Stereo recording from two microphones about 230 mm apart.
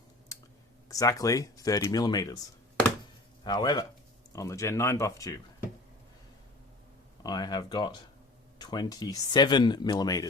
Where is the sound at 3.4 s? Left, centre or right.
Centre.